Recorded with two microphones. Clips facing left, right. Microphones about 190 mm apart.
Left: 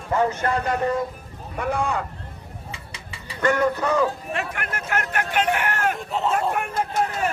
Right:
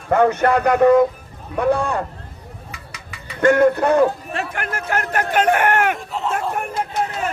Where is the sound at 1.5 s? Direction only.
60° right (ahead or behind).